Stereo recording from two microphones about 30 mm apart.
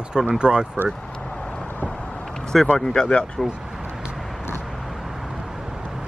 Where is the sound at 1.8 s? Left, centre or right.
Left.